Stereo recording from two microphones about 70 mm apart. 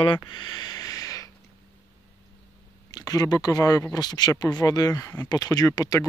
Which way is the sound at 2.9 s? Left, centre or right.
Left.